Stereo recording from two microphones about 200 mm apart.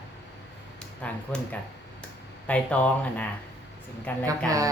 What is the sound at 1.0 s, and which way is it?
Speech, 5° left (ahead or behind).